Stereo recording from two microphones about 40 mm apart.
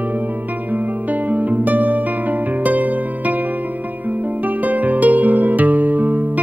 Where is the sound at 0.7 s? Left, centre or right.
Right.